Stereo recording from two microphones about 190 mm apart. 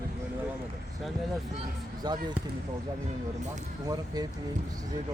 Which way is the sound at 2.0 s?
20° right (ahead or behind).